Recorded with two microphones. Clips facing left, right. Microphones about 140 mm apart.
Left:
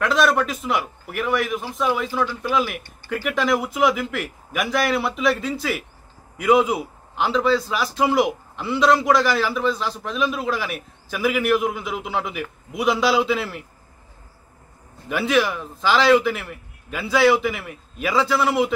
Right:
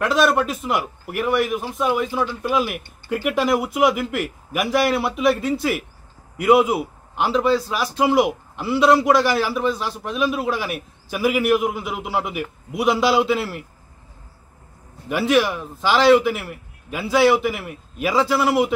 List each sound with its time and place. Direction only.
0.0 s a man's voice: 5° right (ahead or behind)
2.0 s speech: 20° right (ahead or behind)
2.5 s a man's voice: 5° right (ahead or behind)
15.0 s a man's voice: 5° right (ahead or behind)